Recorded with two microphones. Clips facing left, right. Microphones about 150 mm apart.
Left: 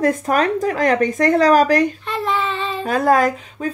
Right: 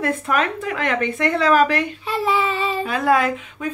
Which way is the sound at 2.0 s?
5° right (ahead or behind).